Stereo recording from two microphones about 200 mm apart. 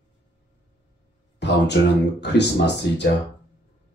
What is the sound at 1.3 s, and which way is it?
Speech, 60° left (ahead or behind).